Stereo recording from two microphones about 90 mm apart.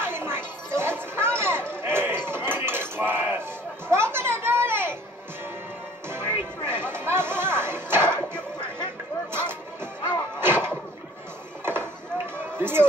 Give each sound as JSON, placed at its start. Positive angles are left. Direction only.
{"t": 0.0, "sound": "music", "side_deg": -25}
{"t": 3.9, "sound": "children playing", "side_deg": -25}
{"t": 6.0, "sound": "music", "side_deg": -25}
{"t": 10.4, "sound": "a sound", "side_deg": -25}
{"t": 11.6, "sound": "chop", "side_deg": -25}
{"t": 12.5, "sound": "chatter", "side_deg": -25}